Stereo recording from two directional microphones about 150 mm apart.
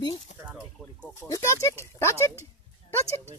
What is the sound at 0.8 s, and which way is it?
Speech, 5° left (ahead or behind).